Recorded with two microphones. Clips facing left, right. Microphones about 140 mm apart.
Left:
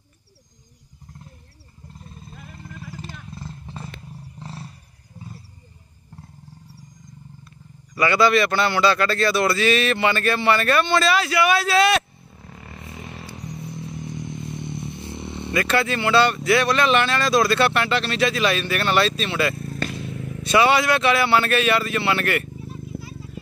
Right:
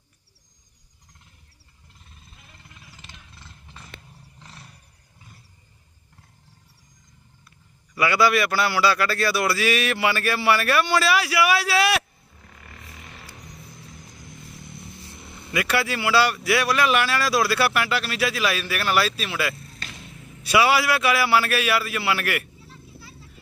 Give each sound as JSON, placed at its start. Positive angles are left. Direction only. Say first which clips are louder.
{"t": 2.0, "sound": "a sound", "louder": "left 11 dB", "side_deg": 40}
{"t": 2.9, "sound": "roaring cats", "louder": "left 12 dB", "side_deg": 40}
{"t": 4.4, "sound": "roar", "louder": "left 10 dB", "side_deg": 35}
{"t": 7.9, "sound": "a man's voice", "louder": "left 2 dB", "side_deg": -10}
{"t": 12.5, "sound": "vehicle", "louder": "left 7 dB", "side_deg": 25}
{"t": 15.5, "sound": "a man's voice", "louder": "left 3 dB", "side_deg": -10}
{"t": 19.5, "sound": "vehicle", "louder": "left 13 dB", "side_deg": 50}
{"t": 20.4, "sound": "a man's voice", "louder": "left 2 dB", "side_deg": -5}
{"t": 22.7, "sound": "children playing", "louder": "left 11 dB", "side_deg": 15}